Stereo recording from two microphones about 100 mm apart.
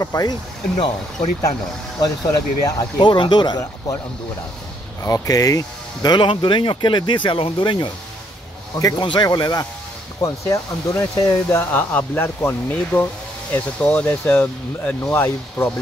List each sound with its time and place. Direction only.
0.0 s speech: 35° left (ahead or behind)
2.0 s speech: 40° left (ahead or behind)
3.0 s speech: 50° left (ahead or behind)
5.0 s speech: 35° left (ahead or behind); by 7.9 s 55° left (ahead or behind)
8.7 s speech: 35° left (ahead or behind)
9.0 s speech: 45° left (ahead or behind); by 15.7 s 20° left (ahead or behind)